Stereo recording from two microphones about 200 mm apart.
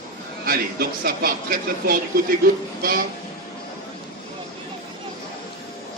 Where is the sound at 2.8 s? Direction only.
45° right (ahead or behind).